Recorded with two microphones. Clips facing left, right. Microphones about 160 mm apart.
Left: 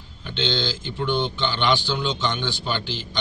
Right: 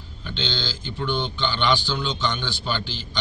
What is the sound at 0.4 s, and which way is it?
A man's voice, 20° left (ahead or behind).